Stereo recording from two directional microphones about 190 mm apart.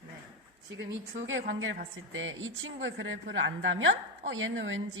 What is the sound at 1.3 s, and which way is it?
A woman's voice, 85° right.